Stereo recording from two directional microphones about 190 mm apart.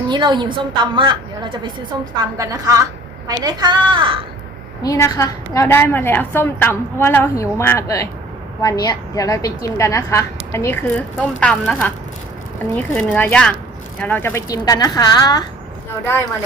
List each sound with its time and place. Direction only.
0.1 s a woman's voice: 25° right (ahead or behind)
4.8 s a woman's voice: 15° left (ahead or behind)